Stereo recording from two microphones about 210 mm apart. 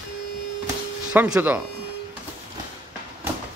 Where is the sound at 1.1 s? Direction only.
5° right (ahead or behind).